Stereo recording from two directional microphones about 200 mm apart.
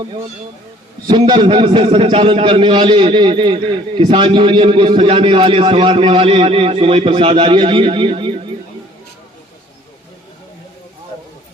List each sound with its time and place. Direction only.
1.0 s a man's voice: 25° right (ahead or behind)